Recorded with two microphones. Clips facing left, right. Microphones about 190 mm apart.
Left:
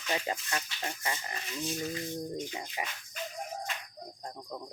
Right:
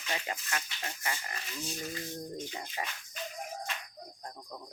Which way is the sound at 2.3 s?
15° left (ahead or behind).